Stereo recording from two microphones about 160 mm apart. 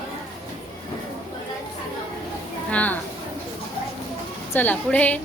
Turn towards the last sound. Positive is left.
turn(degrees=10)  # may be behind; listen again after turning